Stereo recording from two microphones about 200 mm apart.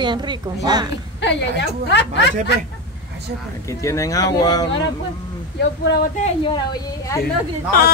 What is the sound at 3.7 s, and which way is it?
Speech, 15° left (ahead or behind).